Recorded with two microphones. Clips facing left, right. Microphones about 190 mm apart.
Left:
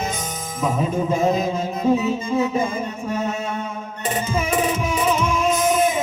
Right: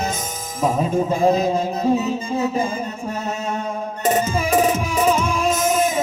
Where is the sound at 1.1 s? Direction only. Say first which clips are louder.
Right 3 dB; 35° right (ahead or behind).